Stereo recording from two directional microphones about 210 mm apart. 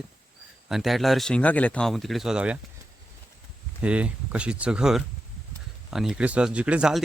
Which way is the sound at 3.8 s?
5° right (ahead or behind).